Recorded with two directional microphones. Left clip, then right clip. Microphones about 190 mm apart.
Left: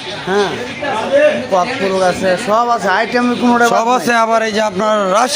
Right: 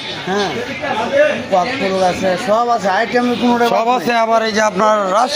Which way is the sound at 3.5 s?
20° left (ahead or behind).